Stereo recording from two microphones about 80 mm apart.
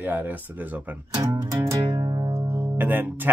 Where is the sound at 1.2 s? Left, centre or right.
Right.